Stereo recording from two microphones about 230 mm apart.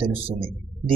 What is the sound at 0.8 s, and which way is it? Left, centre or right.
Music, centre.